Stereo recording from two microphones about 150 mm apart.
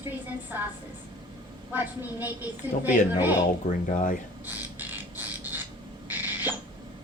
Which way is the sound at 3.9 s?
60° left (ahead or behind).